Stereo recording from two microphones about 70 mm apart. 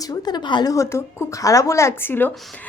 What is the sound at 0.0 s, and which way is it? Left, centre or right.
Speech, left.